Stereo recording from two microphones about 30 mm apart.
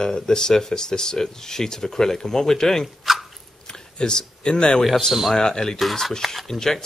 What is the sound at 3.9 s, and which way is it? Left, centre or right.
Speech, left.